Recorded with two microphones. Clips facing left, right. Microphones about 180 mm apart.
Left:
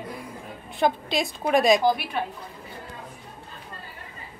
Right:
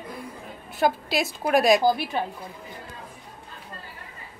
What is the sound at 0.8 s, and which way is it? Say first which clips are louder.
A woman's voice: even; 5° right (ahead or behind).